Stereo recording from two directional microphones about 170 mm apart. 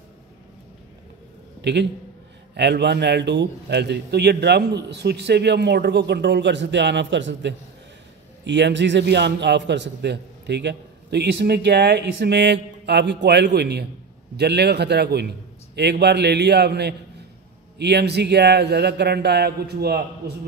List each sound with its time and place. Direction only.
1.6 s a man's voice: 85° right; by 20.3 s 70° right (ahead or behind)